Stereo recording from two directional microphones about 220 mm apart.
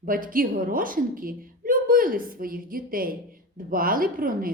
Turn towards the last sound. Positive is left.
turn(degrees=-40)  # may be behind; listen again after turning